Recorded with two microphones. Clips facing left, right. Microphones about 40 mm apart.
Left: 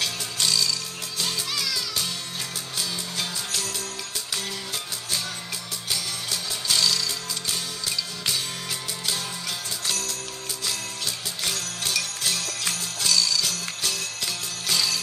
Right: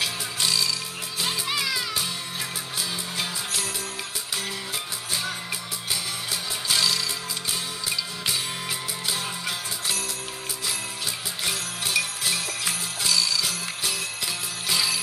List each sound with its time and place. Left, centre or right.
0.0 s music: centre
3.2 s music: centre
6.7 s music: centre
9.8 s music: centre
11.4 s jingle bell: right